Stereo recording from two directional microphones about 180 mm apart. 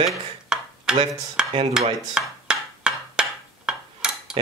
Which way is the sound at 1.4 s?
5° right (ahead or behind).